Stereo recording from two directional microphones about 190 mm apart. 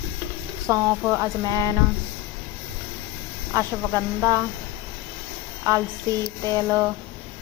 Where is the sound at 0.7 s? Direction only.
15° right (ahead or behind).